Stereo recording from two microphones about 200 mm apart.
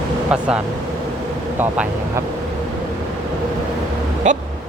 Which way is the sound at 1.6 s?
10° right (ahead or behind).